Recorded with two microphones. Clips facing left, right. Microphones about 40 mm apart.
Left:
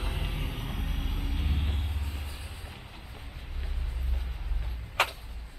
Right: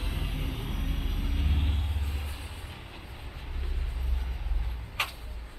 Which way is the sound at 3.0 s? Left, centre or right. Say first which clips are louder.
Right 2 dB; centre.